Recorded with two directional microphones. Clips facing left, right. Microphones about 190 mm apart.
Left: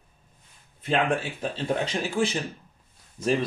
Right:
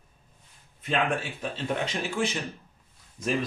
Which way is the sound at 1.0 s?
35° left (ahead or behind).